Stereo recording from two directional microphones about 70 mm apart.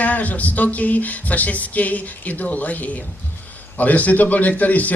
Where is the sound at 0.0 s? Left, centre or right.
Left.